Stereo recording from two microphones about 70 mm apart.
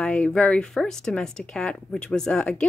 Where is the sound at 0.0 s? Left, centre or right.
Centre.